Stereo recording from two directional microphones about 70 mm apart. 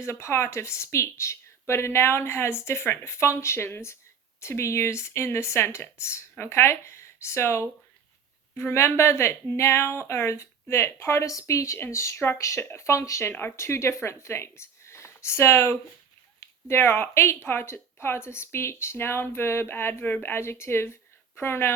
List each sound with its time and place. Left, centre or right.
0.0 s speech: left